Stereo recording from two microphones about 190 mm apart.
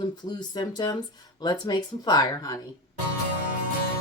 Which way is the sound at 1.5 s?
20° left (ahead or behind).